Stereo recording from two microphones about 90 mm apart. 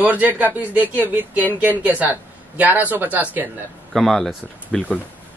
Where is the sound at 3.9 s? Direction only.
Centre (ahead or behind).